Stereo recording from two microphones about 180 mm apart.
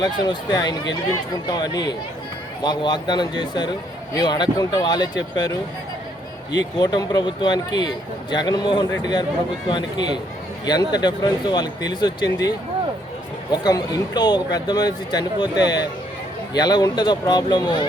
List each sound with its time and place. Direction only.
0.0 s a man's voice: 20° left (ahead or behind)
6.7 s a man's voice: 20° left (ahead or behind)